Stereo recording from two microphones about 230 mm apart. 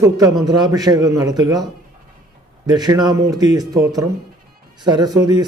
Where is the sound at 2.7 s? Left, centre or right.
Centre.